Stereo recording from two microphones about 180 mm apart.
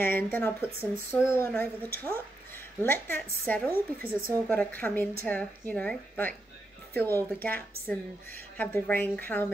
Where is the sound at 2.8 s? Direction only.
10° left (ahead or behind).